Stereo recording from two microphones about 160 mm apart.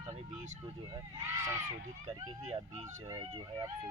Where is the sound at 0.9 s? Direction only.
20° right (ahead or behind).